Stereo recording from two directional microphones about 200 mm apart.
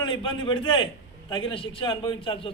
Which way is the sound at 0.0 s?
25° left (ahead or behind).